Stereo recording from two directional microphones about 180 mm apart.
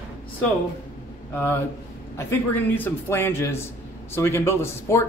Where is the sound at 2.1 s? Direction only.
10° left (ahead or behind).